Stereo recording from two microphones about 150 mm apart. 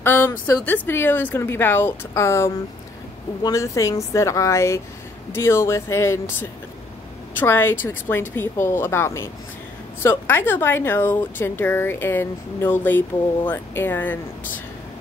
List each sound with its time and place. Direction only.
0.0 s a sound: 15° left (ahead or behind)
0.7 s a woman's voice: 15° left (ahead or behind)
7.3 s a woman's voice: 15° left (ahead or behind)